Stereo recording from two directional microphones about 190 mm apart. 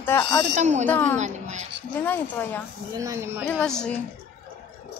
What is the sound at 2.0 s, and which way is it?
Speech, 10° left (ahead or behind).